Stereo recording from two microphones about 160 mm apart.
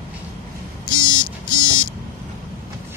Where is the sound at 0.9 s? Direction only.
30° left (ahead or behind).